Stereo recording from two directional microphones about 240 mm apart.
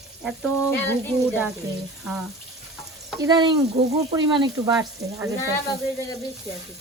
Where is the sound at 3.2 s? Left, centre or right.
Centre.